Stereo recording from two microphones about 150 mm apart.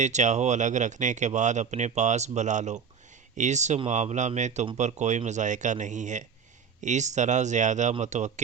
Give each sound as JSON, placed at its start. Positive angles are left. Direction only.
{"t": 0.0, "sound": "speech", "side_deg": -50}